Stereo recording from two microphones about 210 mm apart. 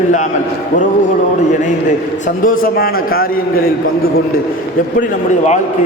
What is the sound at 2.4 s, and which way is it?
A man's voice, 45° left (ahead or behind).